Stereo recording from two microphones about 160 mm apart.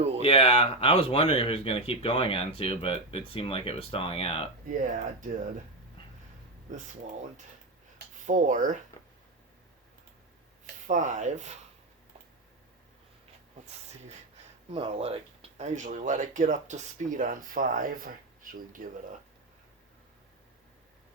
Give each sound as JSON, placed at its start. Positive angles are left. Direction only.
{"t": 0.2, "sound": "speech", "side_deg": 35}
{"t": 4.8, "sound": "speech", "side_deg": -55}
{"t": 8.3, "sound": "speech", "side_deg": -55}
{"t": 10.8, "sound": "speech", "side_deg": -50}
{"t": 14.7, "sound": "speech", "side_deg": -35}